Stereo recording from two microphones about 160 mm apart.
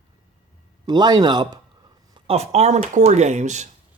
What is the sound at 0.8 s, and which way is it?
Speech, 25° right (ahead or behind).